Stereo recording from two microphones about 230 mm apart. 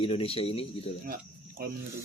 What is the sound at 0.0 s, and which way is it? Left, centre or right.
Speech, left.